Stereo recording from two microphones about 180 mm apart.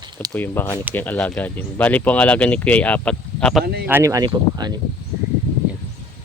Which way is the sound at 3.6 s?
60° right (ahead or behind).